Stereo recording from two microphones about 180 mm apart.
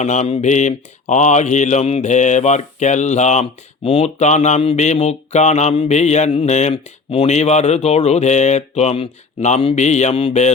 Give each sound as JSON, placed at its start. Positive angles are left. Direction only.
{"t": 0.0, "sound": "speech", "side_deg": 40}